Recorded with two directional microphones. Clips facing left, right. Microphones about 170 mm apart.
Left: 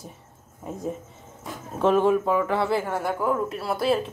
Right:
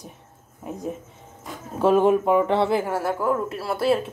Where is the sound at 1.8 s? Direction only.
15° right (ahead or behind).